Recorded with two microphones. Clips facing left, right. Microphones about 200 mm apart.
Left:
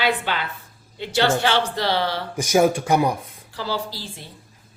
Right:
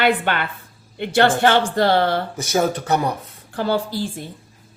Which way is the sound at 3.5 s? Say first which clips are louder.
Right 7 dB; 50° right (ahead or behind).